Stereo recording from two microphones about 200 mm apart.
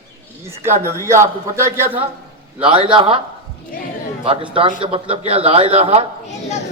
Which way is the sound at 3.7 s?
45° left (ahead or behind).